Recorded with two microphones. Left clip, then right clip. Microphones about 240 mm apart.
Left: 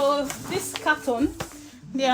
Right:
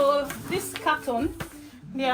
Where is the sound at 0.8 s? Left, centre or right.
Left.